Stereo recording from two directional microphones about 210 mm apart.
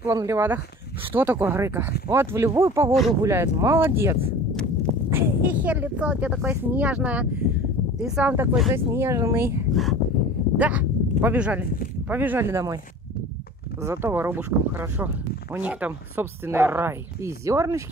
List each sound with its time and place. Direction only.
0.0 s speech: 15° right (ahead or behind)
2.9 s speech: centre (ahead or behind)
3.2 s speech: 15° right (ahead or behind)
13.7 s speech: 15° right (ahead or behind)